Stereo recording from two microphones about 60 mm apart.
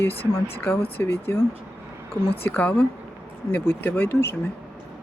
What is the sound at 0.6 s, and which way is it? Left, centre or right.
Speech, left.